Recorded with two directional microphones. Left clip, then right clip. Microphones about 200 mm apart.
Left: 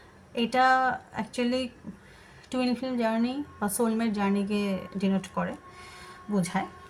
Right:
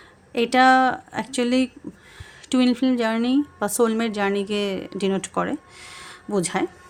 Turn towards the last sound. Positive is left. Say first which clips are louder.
# right 6 dB
turn(degrees=-50)  # may be behind; listen again after turning